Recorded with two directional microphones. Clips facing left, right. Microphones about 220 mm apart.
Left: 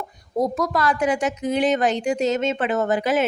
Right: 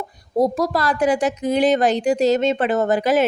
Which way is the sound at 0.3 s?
30° right (ahead or behind).